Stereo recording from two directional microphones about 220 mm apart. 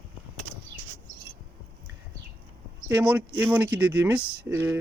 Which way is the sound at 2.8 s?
5° right (ahead or behind).